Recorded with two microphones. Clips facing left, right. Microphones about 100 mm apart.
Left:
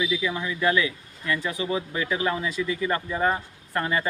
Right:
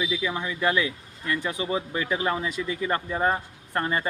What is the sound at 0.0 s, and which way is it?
Speech, 25° right (ahead or behind).